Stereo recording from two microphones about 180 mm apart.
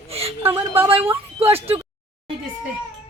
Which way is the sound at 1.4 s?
35° right (ahead or behind).